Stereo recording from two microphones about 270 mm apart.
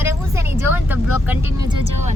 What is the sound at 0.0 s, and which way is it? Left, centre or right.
Vehicle, centre.